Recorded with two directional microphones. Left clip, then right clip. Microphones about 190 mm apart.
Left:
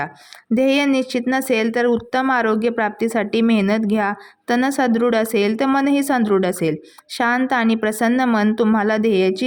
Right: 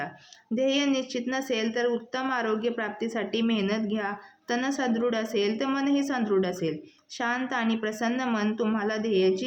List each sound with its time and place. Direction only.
0.5 s a woman's voice: 50° left (ahead or behind)